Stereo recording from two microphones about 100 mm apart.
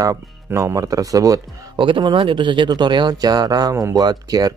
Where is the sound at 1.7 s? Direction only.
50° right (ahead or behind).